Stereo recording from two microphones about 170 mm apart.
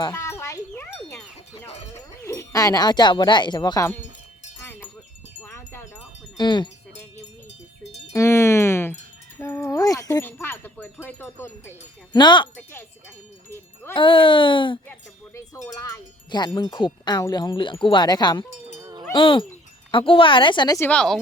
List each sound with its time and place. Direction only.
0.0 s wind chime: 15° left (ahead or behind)
2.2 s speech: 15° left (ahead or behind)
5.4 s wind chime: 15° left (ahead or behind)
6.3 s speech: 25° left (ahead or behind)
8.1 s speech: 15° left (ahead or behind)
9.4 s a sound: 15° left (ahead or behind)
10.2 s speech: 10° left (ahead or behind)
12.1 s speech: 25° left (ahead or behind)
13.9 s speech: 30° left (ahead or behind)
15.4 s speech: 20° left (ahead or behind)
18.8 s cowbell: 20° right (ahead or behind)
19.1 s speech: 30° left (ahead or behind)
20.8 s a woman's voice: 5° left (ahead or behind)